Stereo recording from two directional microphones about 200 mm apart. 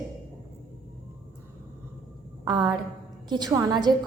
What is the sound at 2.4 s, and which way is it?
A woman's voice, 20° right (ahead or behind).